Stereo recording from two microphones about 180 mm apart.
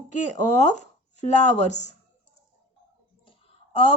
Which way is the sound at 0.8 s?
40° left (ahead or behind).